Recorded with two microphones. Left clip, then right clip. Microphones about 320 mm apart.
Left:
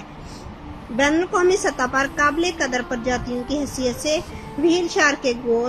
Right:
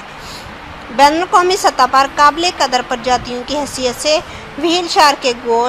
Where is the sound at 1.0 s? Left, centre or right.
Centre.